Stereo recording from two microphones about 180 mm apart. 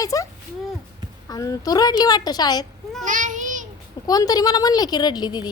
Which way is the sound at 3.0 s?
45° right (ahead or behind).